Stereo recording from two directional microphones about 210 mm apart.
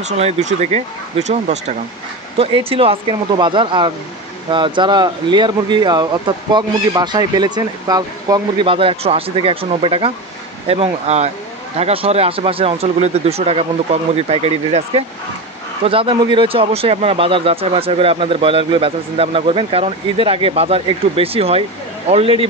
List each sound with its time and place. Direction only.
0.0 s speech: 30° right (ahead or behind)